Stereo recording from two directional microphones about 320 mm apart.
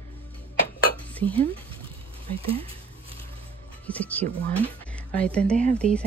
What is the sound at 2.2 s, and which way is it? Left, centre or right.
Speech, centre.